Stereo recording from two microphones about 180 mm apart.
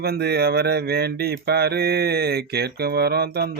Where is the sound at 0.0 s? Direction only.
60° right (ahead or behind).